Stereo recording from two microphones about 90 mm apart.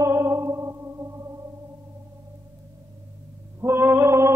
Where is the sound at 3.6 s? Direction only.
25° right (ahead or behind).